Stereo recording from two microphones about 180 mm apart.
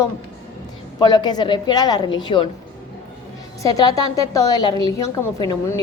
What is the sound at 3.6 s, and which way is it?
A woman's voice, 20° left (ahead or behind).